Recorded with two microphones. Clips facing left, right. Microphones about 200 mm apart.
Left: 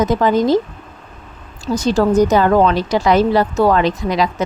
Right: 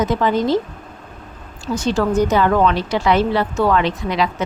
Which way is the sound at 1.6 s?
40° left (ahead or behind).